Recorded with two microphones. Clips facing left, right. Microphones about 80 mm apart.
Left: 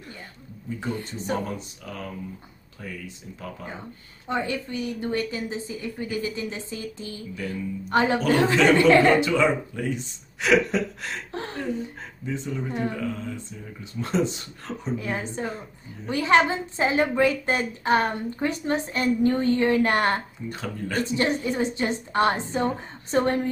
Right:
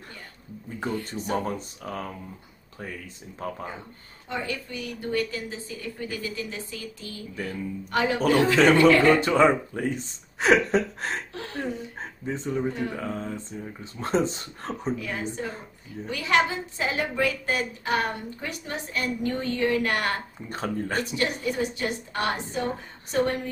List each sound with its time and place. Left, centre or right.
0.9 s a woman's voice: left
1.3 s speech: right
4.3 s a woman's voice: left
7.4 s speech: right
7.9 s a woman's voice: left
8.8 s speech: right
11.3 s a sound: left
12.0 s speech: right
15.0 s a woman's voice: left
20.4 s speech: right
21.0 s a woman's voice: left